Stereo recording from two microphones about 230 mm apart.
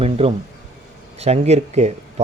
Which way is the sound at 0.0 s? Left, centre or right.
Right.